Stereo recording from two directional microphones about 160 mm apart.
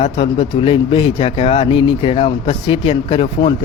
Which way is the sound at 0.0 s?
35° left (ahead or behind).